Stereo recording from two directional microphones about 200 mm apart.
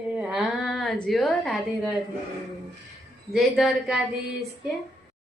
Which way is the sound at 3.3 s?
Centre (ahead or behind).